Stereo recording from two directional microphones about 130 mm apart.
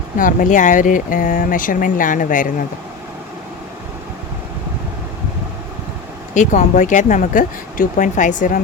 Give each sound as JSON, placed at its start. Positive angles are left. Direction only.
{"t": 0.2, "sound": "speech", "side_deg": 90}
{"t": 6.3, "sound": "speech", "side_deg": 70}